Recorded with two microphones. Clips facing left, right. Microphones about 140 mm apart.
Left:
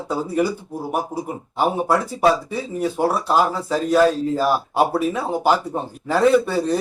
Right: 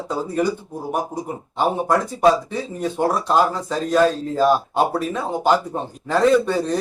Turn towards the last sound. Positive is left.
turn(degrees=10)  # may be behind; listen again after turning